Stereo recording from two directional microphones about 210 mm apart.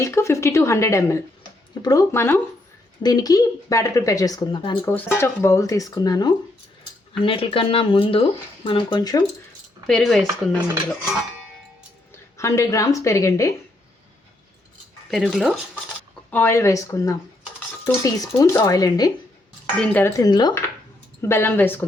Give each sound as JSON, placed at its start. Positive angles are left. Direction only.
{"t": 0.0, "sound": "speech", "side_deg": 15}
{"t": 4.9, "sound": "speech", "side_deg": 10}
{"t": 9.8, "sound": "speech", "side_deg": 0}
{"t": 12.4, "sound": "speech", "side_deg": 15}
{"t": 15.1, "sound": "speech", "side_deg": 0}
{"t": 16.3, "sound": "speech", "side_deg": 10}